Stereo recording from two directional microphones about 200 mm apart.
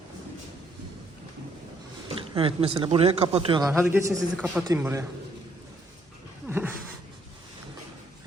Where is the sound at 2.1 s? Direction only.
25° right (ahead or behind).